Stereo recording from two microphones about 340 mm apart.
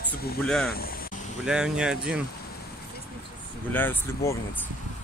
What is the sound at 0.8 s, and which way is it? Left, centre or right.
Vehicle, left.